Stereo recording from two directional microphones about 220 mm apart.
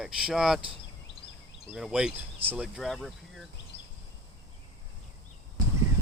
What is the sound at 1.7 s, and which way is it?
Speech, 5° right (ahead or behind).